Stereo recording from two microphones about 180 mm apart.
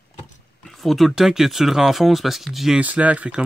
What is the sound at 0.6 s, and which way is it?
Speech, centre (ahead or behind).